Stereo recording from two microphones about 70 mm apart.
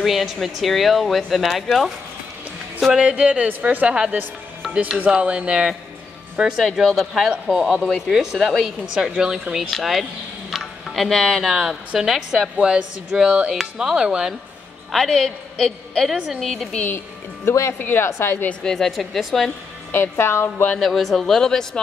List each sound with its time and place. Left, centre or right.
0.0 s a woman's voice: centre
6.6 s a woman's voice: centre
10.5 s a sound: centre
11.9 s a woman's voice: centre
14.9 s a woman's voice: centre
17.5 s a woman's voice: left
18.5 s a woman's voice: centre
19.9 s a woman's voice: left
20.8 s speech: centre